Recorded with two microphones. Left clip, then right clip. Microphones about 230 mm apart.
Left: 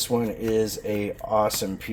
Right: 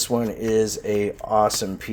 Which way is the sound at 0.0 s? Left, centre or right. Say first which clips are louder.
Right 2 dB; right.